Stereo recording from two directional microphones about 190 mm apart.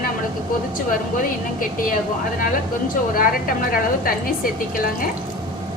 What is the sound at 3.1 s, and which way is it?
A woman's voice, 50° left (ahead or behind).